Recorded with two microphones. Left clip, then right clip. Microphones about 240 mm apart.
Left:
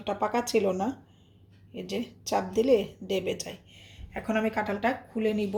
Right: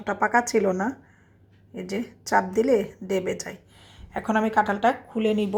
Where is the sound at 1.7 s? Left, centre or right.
Right.